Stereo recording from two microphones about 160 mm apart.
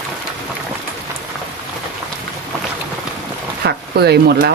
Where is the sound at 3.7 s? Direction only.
90° right.